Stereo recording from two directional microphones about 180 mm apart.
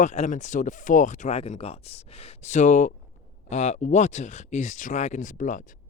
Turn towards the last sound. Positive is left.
turn(degrees=45)  # may be behind; listen again after turning